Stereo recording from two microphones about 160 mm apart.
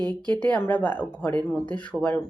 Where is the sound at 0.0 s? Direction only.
25° right (ahead or behind).